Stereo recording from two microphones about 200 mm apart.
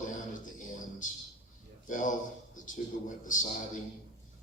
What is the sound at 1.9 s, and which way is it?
A man's voice, 40° left (ahead or behind).